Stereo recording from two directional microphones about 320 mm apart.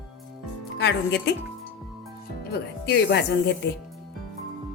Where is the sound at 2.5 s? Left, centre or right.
Left.